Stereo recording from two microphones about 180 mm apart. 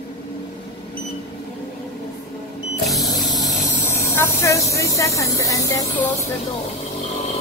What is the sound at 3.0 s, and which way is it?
Sewing machine, 20° left (ahead or behind).